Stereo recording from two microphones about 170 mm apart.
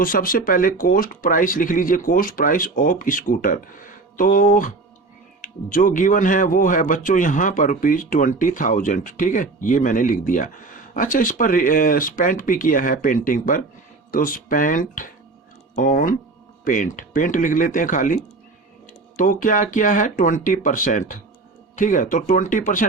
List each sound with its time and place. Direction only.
0.0 s speech: 55° left (ahead or behind)